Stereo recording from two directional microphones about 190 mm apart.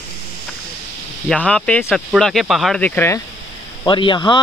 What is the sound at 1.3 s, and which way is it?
Speech, 5° left (ahead or behind).